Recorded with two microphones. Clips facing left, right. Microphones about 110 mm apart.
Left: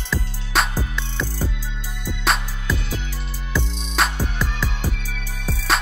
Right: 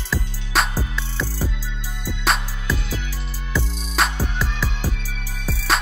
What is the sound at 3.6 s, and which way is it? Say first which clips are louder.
Music: even; 25° left (ahead or behind).